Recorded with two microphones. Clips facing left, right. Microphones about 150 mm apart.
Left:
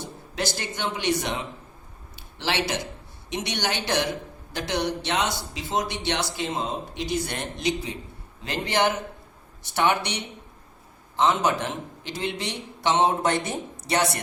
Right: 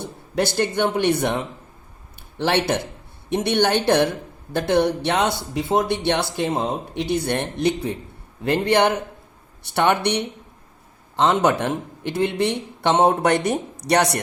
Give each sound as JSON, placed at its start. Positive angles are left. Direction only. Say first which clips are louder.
{"t": 0.0, "sound": "speech", "louder": "right 7 dB", "side_deg": -55}